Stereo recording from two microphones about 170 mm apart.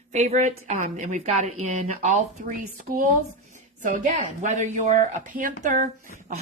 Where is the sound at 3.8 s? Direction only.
50° right (ahead or behind).